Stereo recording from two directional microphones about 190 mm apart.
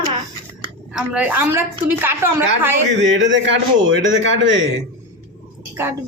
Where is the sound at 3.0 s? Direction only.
75° right (ahead or behind).